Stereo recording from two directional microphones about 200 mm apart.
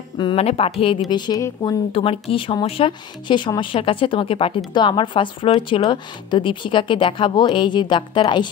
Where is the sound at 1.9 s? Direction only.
30° left (ahead or behind).